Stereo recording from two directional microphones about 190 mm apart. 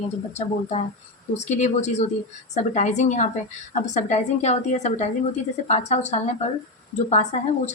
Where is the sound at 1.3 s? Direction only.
35° left (ahead or behind).